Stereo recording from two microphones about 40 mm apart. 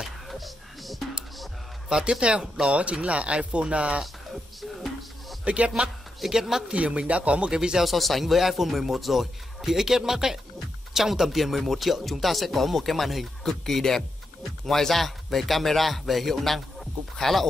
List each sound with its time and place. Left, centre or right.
0.3 s music: centre
1.9 s speech: centre
4.0 s music: centre
5.4 s speech: right
6.2 s speech: centre
6.7 s speech: right
7.8 s speech: centre